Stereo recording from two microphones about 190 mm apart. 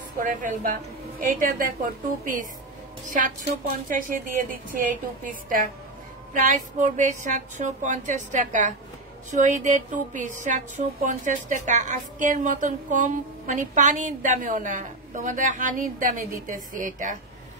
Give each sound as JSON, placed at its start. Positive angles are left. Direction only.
{"t": 0.2, "sound": "a woman's voice", "side_deg": -45}
{"t": 3.1, "sound": "a woman's voice", "side_deg": -45}